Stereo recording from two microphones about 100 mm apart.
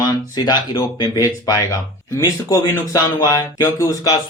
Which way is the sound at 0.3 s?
45° left (ahead or behind).